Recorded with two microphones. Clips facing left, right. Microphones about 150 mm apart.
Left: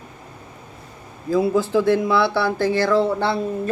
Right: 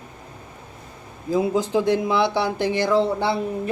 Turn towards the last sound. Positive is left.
turn(degrees=-15)  # may be behind; listen again after turning